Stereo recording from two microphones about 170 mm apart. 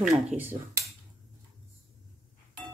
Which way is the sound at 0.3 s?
10° right (ahead or behind).